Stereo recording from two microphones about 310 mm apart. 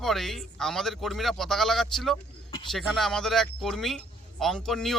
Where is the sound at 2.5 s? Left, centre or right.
Centre.